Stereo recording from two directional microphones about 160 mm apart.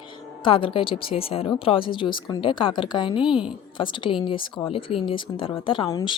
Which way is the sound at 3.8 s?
30° left (ahead or behind).